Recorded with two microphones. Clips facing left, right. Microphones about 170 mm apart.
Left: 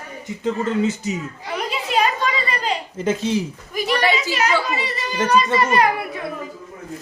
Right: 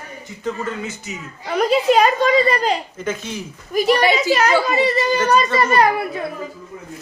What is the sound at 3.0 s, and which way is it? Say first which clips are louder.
Speech: left 5 dB; 30° left (ahead or behind).